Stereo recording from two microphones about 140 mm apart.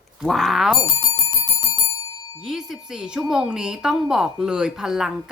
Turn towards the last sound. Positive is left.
turn(degrees=-5)  # may be behind; listen again after turning